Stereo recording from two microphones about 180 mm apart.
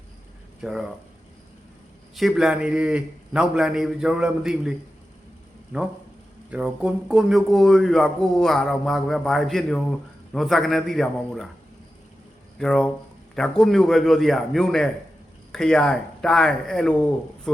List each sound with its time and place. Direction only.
0.6 s speech: 5° right (ahead or behind)
2.1 s speech: centre (ahead or behind)
6.5 s speech: 5° right (ahead or behind)
12.5 s speech: 5° left (ahead or behind)